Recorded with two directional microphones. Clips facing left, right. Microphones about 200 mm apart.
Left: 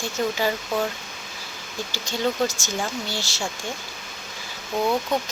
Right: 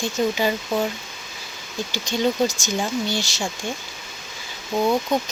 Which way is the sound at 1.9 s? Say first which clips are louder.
Right 3 dB; 15° right (ahead or behind).